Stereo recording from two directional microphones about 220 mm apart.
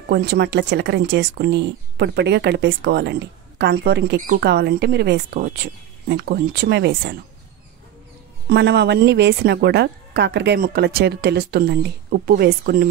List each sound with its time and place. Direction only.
0.1 s speech: 50° right (ahead or behind)
8.5 s speech: 50° right (ahead or behind)